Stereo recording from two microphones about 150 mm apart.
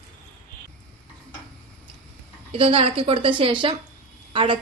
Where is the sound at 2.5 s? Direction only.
40° right (ahead or behind).